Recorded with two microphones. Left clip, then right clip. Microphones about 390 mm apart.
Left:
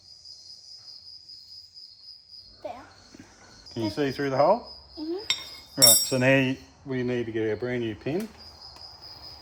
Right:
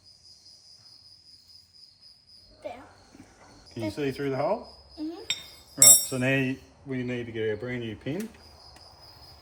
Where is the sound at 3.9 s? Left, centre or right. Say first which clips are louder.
Left 5 dB; centre.